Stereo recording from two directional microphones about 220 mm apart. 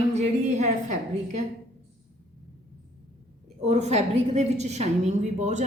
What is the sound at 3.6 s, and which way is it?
A woman's voice, 30° right (ahead or behind).